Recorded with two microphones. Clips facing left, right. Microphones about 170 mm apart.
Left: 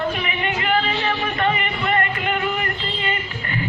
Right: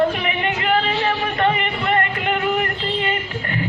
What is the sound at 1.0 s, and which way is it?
Music, 35° right (ahead or behind).